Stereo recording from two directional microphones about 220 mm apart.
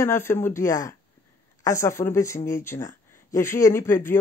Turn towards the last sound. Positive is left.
turn(degrees=10)  # may be behind; listen again after turning